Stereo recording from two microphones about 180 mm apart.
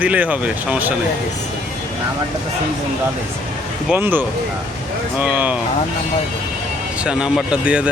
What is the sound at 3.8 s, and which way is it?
Speech, 10° right (ahead or behind).